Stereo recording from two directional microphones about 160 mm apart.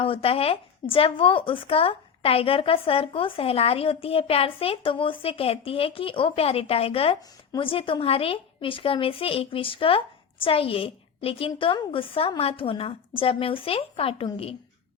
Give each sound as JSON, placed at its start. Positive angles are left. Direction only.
{"t": 0.0, "sound": "speech", "side_deg": 35}